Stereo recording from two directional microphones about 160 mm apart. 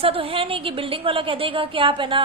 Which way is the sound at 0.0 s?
35° right (ahead or behind).